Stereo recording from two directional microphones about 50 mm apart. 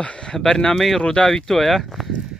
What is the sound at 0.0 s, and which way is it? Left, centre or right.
Speech, centre.